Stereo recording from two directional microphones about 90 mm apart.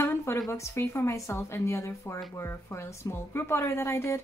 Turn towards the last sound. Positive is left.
turn(degrees=30)  # may be behind; listen again after turning